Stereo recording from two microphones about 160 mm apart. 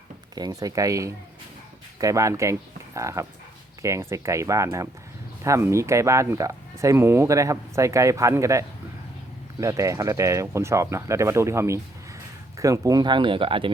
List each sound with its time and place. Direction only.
0.3 s speech: 25° right (ahead or behind)